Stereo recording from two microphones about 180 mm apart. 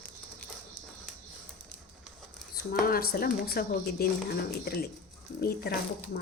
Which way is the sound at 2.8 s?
55° left (ahead or behind).